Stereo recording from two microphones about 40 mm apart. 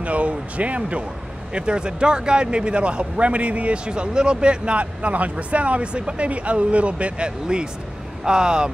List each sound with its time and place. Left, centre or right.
0.0 s a man's voice: right